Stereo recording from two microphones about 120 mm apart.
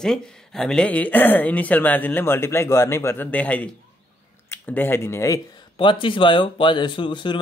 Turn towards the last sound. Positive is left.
turn(degrees=45)  # may be behind; listen again after turning